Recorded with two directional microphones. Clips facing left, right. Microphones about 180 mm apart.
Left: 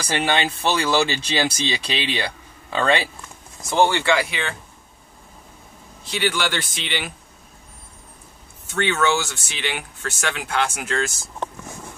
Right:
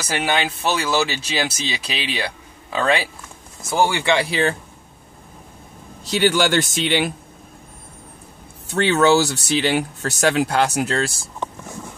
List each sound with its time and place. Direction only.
0.0 s speech: 5° right (ahead or behind)
4.1 s speech: 30° right (ahead or behind)
6.0 s speech: 40° right (ahead or behind)
8.6 s speech: 35° right (ahead or behind)